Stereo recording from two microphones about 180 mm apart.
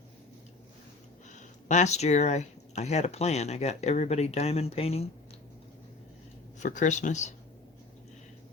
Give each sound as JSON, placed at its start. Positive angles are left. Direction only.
{"t": 1.3, "sound": "speech", "side_deg": 40}
{"t": 6.6, "sound": "speech", "side_deg": 45}